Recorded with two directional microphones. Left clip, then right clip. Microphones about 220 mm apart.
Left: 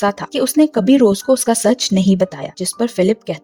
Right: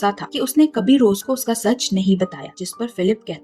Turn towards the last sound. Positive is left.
turn(degrees=40)  # may be behind; listen again after turning